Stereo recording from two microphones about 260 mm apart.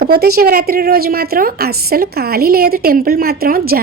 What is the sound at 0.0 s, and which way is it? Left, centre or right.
A woman's voice, right.